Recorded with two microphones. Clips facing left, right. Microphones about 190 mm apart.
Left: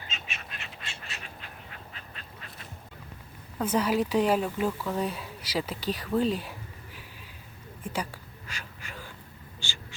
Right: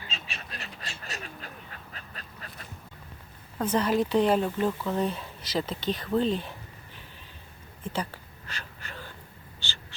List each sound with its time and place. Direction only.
0.1 s duck: 35° right (ahead or behind)
3.6 s speech: 10° left (ahead or behind)
7.9 s a sound: 10° left (ahead or behind)
9.6 s duck: 10° left (ahead or behind)